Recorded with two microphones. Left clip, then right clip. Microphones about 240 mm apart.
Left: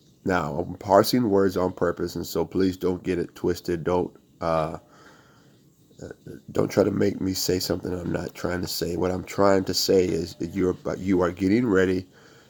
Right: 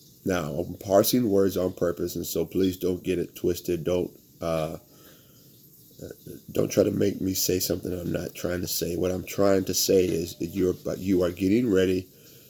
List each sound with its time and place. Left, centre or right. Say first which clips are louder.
0.3 s speech: left 3 dB; left
6.5 s speech: left 1 dB; centre